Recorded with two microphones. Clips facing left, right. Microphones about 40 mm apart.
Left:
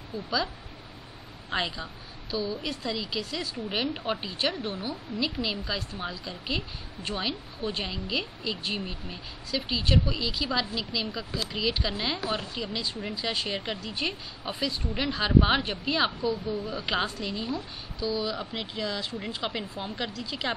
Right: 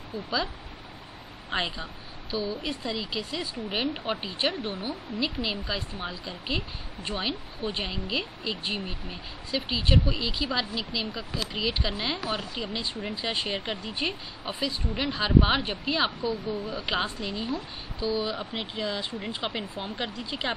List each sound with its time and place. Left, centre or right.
1.5 s speech: centre
4.2 s speech: right
17.5 s speech: right
18.0 s speech: right